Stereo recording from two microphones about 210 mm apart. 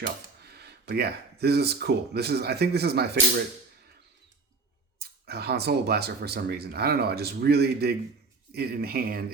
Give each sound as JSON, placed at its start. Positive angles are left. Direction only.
{"t": 0.5, "sound": "speech", "side_deg": -50}
{"t": 4.9, "sound": "speech", "side_deg": -50}